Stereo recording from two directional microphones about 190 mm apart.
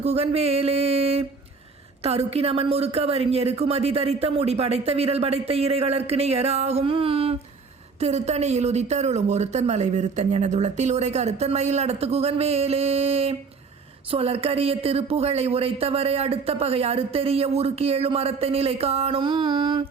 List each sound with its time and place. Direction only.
0.0 s speech: 35° right (ahead or behind)